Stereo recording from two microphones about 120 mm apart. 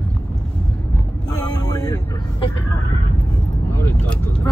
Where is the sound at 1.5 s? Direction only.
30° left (ahead or behind).